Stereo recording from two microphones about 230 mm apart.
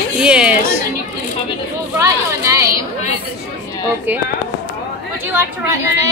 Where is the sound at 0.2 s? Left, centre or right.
Centre.